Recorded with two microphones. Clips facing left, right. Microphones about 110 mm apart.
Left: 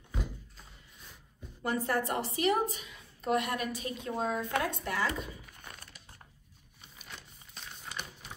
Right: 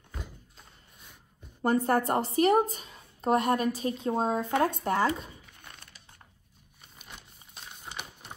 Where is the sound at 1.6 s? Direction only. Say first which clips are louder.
Right 6 dB; 45° right (ahead or behind).